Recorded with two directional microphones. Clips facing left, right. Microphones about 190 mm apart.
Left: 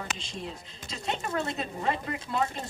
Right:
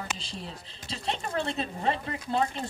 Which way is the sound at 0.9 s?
30° right (ahead or behind).